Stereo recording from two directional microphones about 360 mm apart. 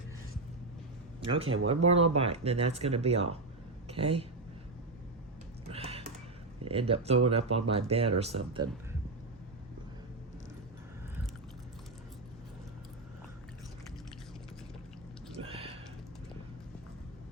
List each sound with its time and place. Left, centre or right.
1.2 s a woman's voice: centre
5.6 s computer keyboard: centre
6.7 s speech: centre
15.4 s a sound: centre